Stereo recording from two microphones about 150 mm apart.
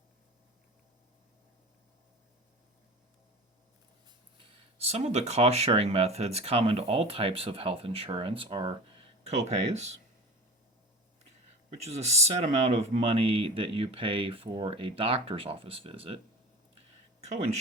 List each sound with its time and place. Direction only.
4.4 s speech: 35° right (ahead or behind)
9.2 s speech: 45° right (ahead or behind)
11.8 s speech: 45° right (ahead or behind)
17.2 s speech: 50° right (ahead or behind)